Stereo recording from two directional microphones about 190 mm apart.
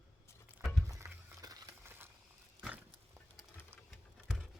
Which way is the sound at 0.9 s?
15° right (ahead or behind).